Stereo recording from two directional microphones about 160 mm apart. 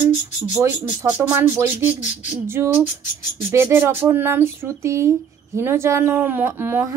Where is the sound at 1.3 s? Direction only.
10° right (ahead or behind).